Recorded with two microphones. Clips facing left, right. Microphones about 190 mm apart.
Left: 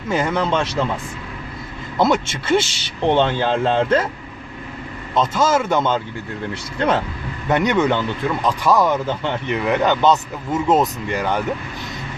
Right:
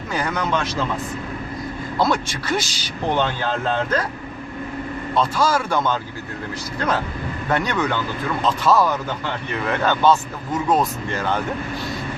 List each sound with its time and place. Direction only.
0.1 s speech: 25° left (ahead or behind)
2.0 s speech: 20° left (ahead or behind)
5.1 s speech: 20° left (ahead or behind)